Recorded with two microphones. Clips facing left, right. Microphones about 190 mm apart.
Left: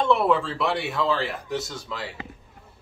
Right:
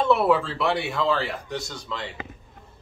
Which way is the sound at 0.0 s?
5° right (ahead or behind).